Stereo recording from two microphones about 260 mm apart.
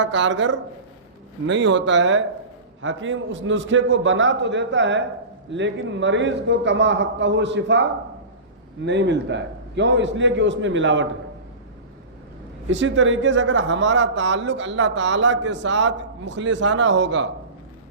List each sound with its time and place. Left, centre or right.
0.0 s speech: right
12.6 s speech: right